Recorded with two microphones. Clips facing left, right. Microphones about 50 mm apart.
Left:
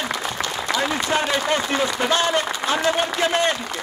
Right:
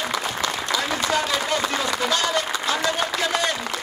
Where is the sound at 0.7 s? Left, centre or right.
Left.